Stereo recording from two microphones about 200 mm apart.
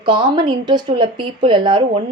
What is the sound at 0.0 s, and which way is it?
Speech, 25° right (ahead or behind).